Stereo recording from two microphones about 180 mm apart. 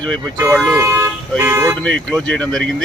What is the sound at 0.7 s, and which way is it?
Speech, 15° right (ahead or behind).